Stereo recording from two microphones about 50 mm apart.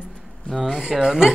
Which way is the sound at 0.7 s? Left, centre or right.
Centre.